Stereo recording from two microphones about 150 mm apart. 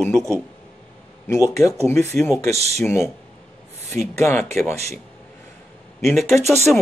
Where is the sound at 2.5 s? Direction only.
45° right (ahead or behind).